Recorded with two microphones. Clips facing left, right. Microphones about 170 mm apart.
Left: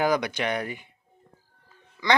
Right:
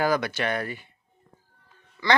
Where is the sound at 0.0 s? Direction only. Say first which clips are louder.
Even; 15° left (ahead or behind).